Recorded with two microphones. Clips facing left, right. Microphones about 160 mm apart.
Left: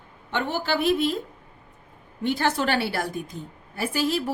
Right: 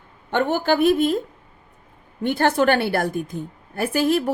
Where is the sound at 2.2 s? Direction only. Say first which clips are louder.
Right 5 dB; 55° right (ahead or behind).